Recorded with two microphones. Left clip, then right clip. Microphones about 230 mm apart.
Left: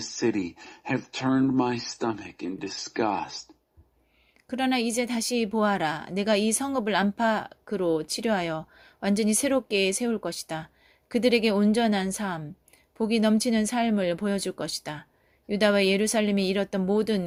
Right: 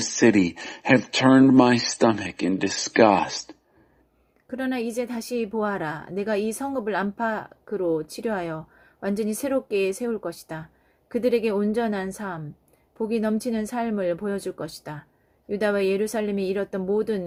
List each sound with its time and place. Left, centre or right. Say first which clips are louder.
0.0 s speech: right 8 dB; right
4.4 s speech: left 2 dB; left